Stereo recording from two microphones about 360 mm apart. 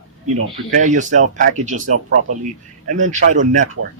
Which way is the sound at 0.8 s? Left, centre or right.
Right.